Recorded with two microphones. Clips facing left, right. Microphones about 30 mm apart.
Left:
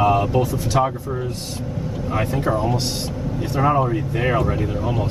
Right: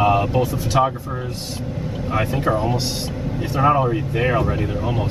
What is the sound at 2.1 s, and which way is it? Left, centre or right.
Speech, centre.